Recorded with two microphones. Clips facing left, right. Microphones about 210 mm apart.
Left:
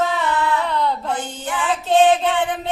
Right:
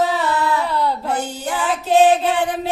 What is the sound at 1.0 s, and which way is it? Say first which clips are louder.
Music: right 2 dB; 40° right (ahead or behind).